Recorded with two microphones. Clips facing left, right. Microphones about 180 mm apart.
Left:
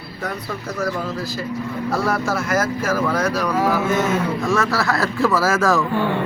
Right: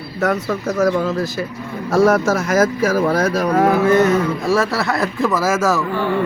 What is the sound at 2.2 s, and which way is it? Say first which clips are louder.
Speech: right 5 dB; 90° right.